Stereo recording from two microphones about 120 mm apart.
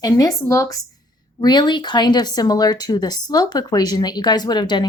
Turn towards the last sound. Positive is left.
turn(degrees=35)  # may be behind; listen again after turning